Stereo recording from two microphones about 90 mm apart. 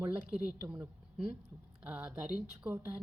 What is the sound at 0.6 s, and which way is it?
A woman's voice, 20° right (ahead or behind).